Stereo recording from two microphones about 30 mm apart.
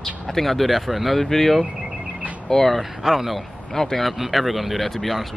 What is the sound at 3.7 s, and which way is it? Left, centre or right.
Speech, centre.